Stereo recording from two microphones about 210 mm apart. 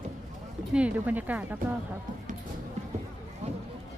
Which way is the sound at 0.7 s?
5° right (ahead or behind).